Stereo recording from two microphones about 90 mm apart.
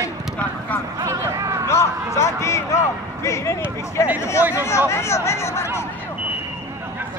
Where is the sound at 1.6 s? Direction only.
30° left (ahead or behind).